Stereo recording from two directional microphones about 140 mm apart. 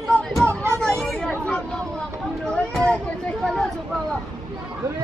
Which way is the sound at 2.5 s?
5° left (ahead or behind).